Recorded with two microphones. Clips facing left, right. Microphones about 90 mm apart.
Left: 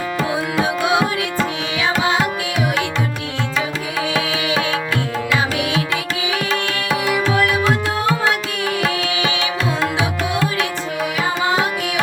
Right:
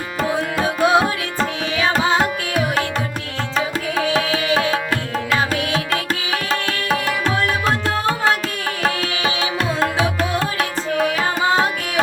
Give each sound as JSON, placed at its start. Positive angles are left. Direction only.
{"t": 0.8, "sound": "music", "side_deg": -35}
{"t": 3.9, "sound": "music", "side_deg": -35}
{"t": 6.5, "sound": "music", "side_deg": -40}
{"t": 7.3, "sound": "tabla", "side_deg": -40}
{"t": 8.8, "sound": "music", "side_deg": -40}